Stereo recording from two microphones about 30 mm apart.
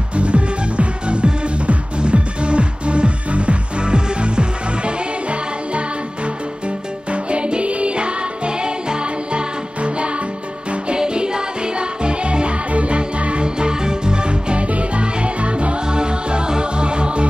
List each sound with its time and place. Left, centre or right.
0.1 s music: right
3.8 s music: right
7.1 s music: right
11.0 s music: right
13.6 s music: right